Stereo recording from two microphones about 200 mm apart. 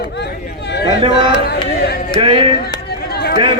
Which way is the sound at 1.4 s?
50° left (ahead or behind).